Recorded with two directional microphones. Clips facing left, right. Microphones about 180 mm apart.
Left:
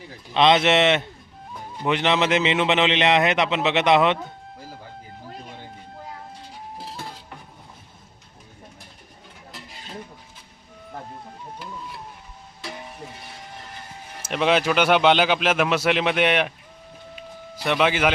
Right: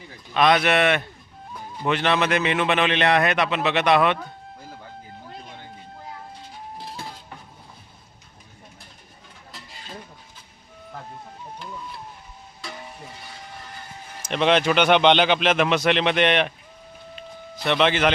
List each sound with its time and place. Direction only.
0.3 s a man's voice: 25° left (ahead or behind)
14.2 s speech: 5° left (ahead or behind)
17.2 s a sound: 10° left (ahead or behind)